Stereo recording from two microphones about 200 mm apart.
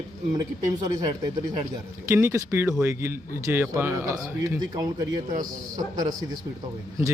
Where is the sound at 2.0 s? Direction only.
15° right (ahead or behind).